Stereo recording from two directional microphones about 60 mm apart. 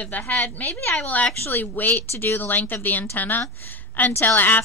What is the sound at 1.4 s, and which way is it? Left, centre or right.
A woman's voice, left.